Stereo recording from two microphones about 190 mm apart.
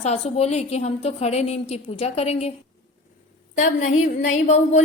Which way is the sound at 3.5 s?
40° left (ahead or behind).